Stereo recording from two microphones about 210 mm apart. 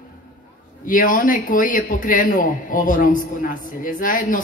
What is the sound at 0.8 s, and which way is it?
A man's voice, 40° left (ahead or behind).